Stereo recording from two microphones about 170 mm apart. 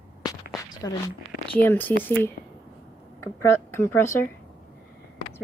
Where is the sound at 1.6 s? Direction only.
10° left (ahead or behind).